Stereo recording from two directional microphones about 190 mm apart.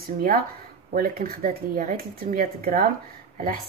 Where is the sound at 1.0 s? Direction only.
45° right (ahead or behind).